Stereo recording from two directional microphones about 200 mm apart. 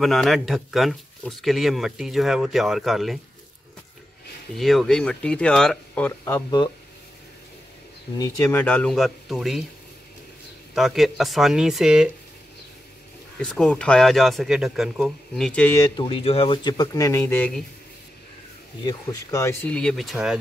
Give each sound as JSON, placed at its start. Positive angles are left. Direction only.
{"t": 0.0, "sound": "speech", "side_deg": 0}
{"t": 4.6, "sound": "speech", "side_deg": 0}
{"t": 8.2, "sound": "speech", "side_deg": 15}
{"t": 10.7, "sound": "speech", "side_deg": 0}
{"t": 13.4, "sound": "speech", "side_deg": 5}
{"t": 15.8, "sound": "speech", "side_deg": 25}
{"t": 18.9, "sound": "speech", "side_deg": 15}